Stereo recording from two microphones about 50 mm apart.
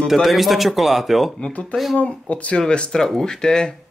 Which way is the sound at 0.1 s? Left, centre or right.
Centre.